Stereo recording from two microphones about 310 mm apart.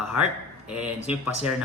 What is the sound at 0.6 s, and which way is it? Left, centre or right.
Speech, centre.